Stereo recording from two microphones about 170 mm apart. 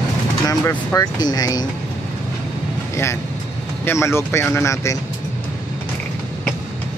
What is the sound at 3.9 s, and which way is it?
Speech, 15° left (ahead or behind).